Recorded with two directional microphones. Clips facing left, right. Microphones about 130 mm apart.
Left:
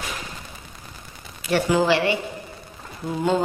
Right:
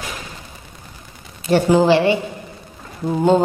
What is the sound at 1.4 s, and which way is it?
Speech, 30° right (ahead or behind).